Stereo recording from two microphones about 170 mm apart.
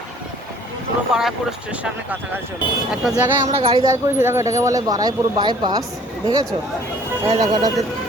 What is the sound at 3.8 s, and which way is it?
Speech, 15° right (ahead or behind).